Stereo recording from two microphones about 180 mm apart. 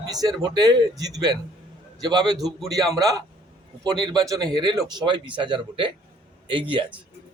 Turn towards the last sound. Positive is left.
turn(degrees=-30)  # may be behind; listen again after turning